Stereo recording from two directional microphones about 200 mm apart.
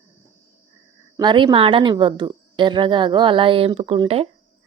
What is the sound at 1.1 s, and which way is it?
A woman's voice, 25° right (ahead or behind).